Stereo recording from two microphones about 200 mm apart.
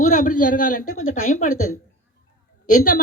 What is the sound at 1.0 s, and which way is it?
Speech, 90° left.